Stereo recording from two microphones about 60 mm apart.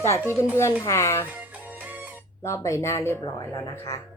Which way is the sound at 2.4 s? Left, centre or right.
Left.